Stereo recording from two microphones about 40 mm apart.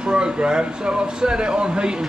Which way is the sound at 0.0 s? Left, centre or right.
Right.